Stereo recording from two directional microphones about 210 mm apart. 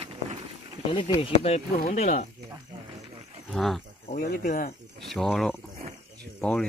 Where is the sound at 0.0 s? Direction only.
30° right (ahead or behind).